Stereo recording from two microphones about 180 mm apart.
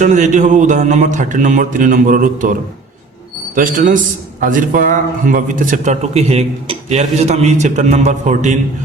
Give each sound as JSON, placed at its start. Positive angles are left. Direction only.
{"t": 0.0, "sound": "a man's voice", "side_deg": -40}